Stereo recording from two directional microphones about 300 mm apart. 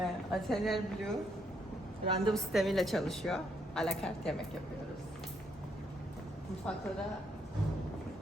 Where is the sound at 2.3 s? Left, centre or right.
Centre.